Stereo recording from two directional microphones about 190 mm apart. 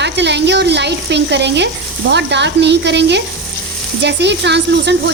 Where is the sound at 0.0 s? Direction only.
65° right (ahead or behind).